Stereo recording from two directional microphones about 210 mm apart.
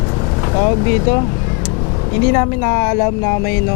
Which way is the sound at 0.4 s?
20° left (ahead or behind).